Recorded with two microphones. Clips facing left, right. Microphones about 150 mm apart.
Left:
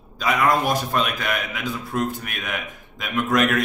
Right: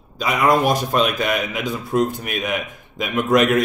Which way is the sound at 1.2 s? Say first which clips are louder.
Right 5 dB; 20° right (ahead or behind).